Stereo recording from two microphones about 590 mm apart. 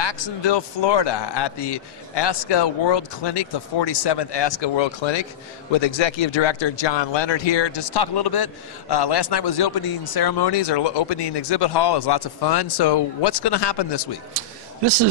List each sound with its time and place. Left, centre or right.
0.0 s a man's voice: left